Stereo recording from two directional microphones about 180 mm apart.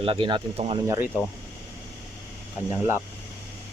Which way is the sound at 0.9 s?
10° right (ahead or behind).